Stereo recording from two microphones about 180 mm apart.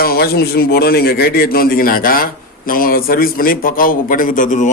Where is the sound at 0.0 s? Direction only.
60° left (ahead or behind).